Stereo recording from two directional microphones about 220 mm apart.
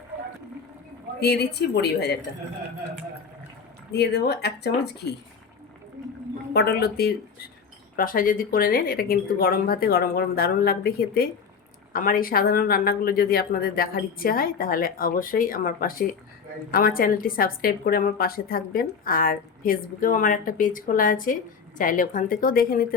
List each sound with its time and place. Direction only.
1.2 s a woman's voice: 50° left (ahead or behind)
3.9 s a woman's voice: 50° left (ahead or behind)
6.0 s a sound: 15° right (ahead or behind)
6.5 s a woman's voice: 45° left (ahead or behind)